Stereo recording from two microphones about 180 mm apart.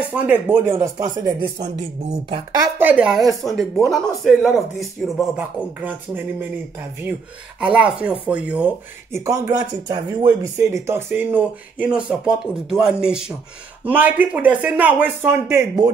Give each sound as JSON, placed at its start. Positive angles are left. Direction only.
{"t": 0.1, "sound": "speech", "side_deg": -10}
{"t": 2.8, "sound": "speech", "side_deg": -10}
{"t": 7.6, "sound": "speech", "side_deg": -5}
{"t": 9.2, "sound": "speech", "side_deg": -20}